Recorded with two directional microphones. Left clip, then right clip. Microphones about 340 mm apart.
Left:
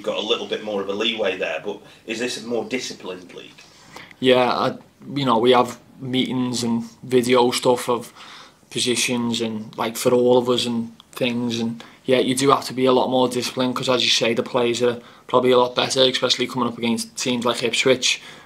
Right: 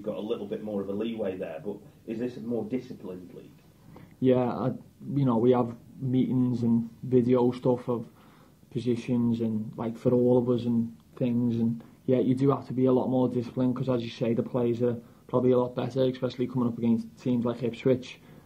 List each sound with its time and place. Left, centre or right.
0.0 s speech: centre
2.4 s speech: centre
2.7 s speech: centre
12.1 s speech: centre